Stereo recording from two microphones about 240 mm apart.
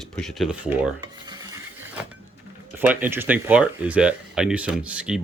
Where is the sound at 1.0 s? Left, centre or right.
Centre.